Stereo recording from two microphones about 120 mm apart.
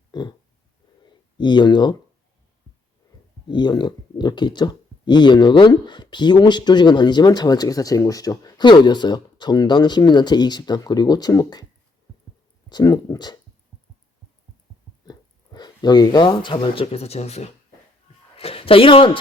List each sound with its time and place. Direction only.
0.1 s a sound: 35° left (ahead or behind)
1.4 s speech: 40° left (ahead or behind)
3.4 s speech: 40° left (ahead or behind)
12.6 s speech: 35° left (ahead or behind)
15.0 s speech: 35° left (ahead or behind); by 17.5 s 60° left (ahead or behind)
18.3 s speech: 50° left (ahead or behind)